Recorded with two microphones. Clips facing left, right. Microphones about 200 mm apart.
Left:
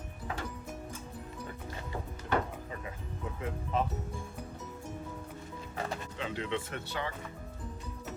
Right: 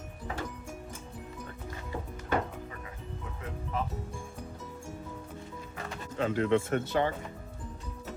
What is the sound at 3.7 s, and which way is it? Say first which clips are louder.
Music: left 3 dB; 25° left (ahead or behind).